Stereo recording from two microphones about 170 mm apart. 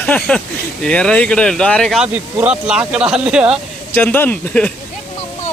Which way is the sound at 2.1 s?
5° right (ahead or behind).